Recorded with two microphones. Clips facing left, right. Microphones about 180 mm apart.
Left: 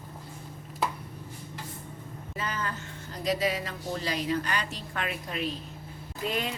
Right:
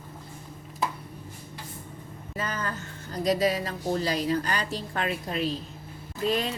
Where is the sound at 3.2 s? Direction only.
40° right (ahead or behind).